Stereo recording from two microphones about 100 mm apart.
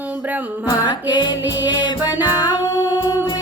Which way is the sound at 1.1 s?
45° left (ahead or behind).